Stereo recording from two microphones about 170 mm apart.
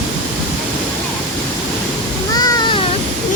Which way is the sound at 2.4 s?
25° left (ahead or behind).